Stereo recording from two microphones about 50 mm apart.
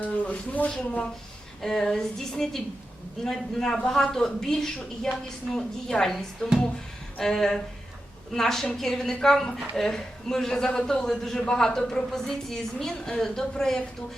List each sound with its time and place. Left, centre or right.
0.0 s speech: left
1.6 s speech: centre